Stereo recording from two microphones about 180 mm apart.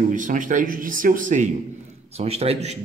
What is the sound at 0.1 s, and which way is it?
Speech, 45° right (ahead or behind).